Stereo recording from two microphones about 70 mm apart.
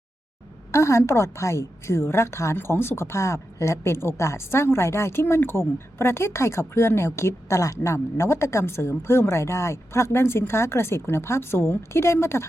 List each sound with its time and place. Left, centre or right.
0.7 s a woman's voice: left